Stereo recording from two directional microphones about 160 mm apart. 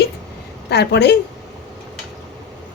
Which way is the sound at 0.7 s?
90° left.